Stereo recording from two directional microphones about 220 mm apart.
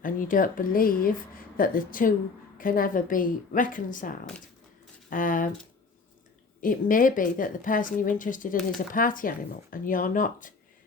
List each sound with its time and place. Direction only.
0.0 s a woman's voice: 40° left (ahead or behind)
6.6 s a woman's voice: 40° left (ahead or behind)